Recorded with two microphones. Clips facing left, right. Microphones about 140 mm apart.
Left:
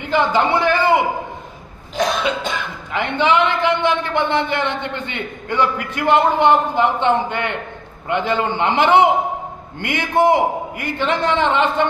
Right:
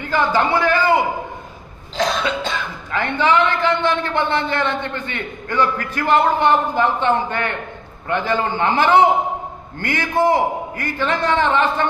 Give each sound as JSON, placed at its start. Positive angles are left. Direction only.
{"t": 0.0, "sound": "a man's voice", "side_deg": 20}
{"t": 2.0, "sound": "a man's voice", "side_deg": 15}